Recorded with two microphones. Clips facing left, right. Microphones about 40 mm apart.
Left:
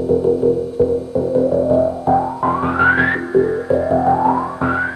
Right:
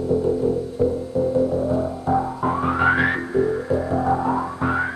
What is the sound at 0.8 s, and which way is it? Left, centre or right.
Music, centre.